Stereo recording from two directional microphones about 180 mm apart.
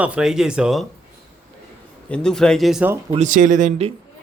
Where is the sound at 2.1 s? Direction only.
5° left (ahead or behind).